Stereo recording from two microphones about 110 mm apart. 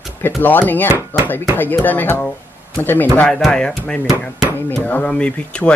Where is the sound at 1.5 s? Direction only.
15° left (ahead or behind).